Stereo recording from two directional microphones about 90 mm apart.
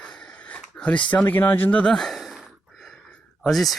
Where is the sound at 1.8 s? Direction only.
5° left (ahead or behind).